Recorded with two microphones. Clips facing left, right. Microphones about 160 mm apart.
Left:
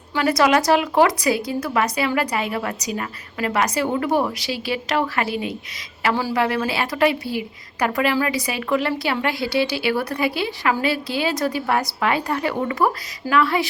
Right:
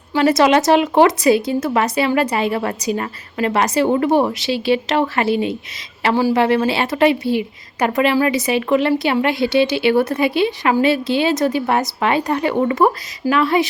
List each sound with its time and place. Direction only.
0.1 s speech: 25° right (ahead or behind)